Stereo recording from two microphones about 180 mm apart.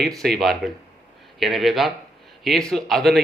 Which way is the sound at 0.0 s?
Centre (ahead or behind).